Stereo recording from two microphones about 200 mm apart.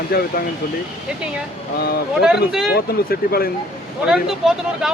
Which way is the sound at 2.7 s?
50° left (ahead or behind).